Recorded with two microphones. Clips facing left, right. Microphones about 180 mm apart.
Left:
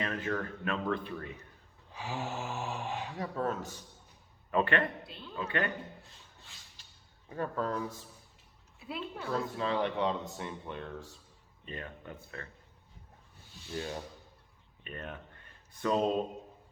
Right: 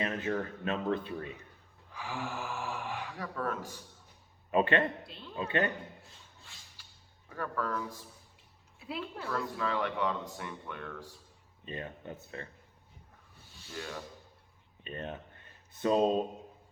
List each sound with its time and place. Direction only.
0.0 s speech: 20° right (ahead or behind)
1.9 s speech: 25° left (ahead or behind)
4.5 s speech: 20° right (ahead or behind)
5.0 s speech: centre (ahead or behind)
5.4 s speech: 25° right (ahead or behind)
7.3 s speech: 25° left (ahead or behind)
8.8 s speech: centre (ahead or behind)
9.3 s speech: 25° left (ahead or behind)
11.6 s speech: 20° right (ahead or behind)
13.7 s speech: 30° left (ahead or behind)
14.8 s speech: 25° right (ahead or behind)